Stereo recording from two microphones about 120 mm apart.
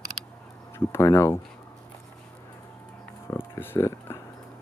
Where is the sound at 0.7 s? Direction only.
20° left (ahead or behind).